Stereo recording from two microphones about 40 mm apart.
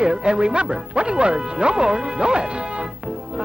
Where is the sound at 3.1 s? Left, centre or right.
Centre.